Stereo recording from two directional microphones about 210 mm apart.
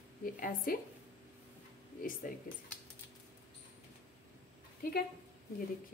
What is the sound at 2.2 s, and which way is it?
Speech, 40° left (ahead or behind).